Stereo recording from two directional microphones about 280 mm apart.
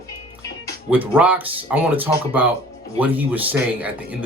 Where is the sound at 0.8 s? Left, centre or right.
Centre.